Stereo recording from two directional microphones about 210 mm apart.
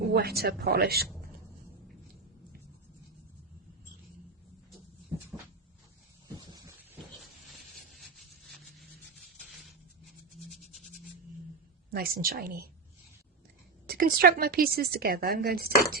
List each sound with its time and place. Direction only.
0.1 s a woman's voice: 50° right (ahead or behind)
11.9 s a woman's voice: 45° right (ahead or behind)
13.8 s a woman's voice: 45° right (ahead or behind)